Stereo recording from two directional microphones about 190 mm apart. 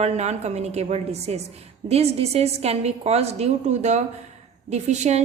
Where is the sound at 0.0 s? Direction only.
35° right (ahead or behind).